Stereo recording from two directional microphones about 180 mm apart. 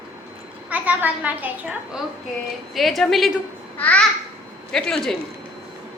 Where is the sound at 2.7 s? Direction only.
Centre (ahead or behind).